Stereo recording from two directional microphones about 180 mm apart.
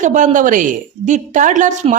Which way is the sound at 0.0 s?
45° right (ahead or behind).